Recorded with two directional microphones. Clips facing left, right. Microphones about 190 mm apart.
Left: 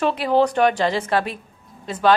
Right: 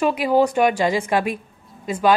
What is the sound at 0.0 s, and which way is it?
A woman's voice, 10° right (ahead or behind).